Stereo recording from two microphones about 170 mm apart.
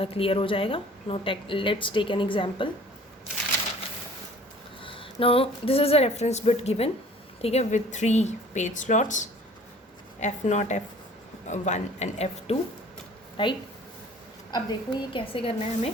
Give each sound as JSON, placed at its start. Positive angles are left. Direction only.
{"t": 0.0, "sound": "a woman's voice", "side_deg": 35}
{"t": 4.8, "sound": "a woman's voice", "side_deg": 30}
{"t": 13.3, "sound": "a woman's voice", "side_deg": 30}